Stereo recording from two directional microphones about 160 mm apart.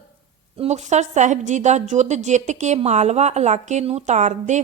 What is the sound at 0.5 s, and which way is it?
A woman's voice, 40° right (ahead or behind).